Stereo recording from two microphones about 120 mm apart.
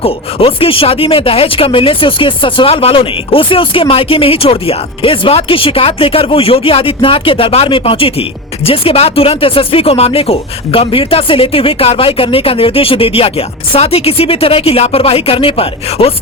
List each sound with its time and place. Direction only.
0.0 s speech: 50° left (ahead or behind)